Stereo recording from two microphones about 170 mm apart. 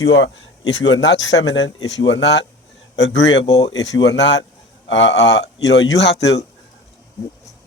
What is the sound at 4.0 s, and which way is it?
Speech, 90° left.